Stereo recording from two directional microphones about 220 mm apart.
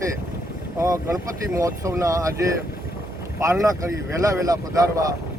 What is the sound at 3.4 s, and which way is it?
Speech, 15° right (ahead or behind).